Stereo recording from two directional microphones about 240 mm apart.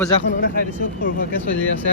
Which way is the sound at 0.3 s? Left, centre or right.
Left.